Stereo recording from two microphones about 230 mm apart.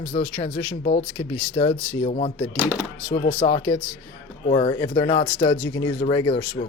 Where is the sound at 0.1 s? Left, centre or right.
Left.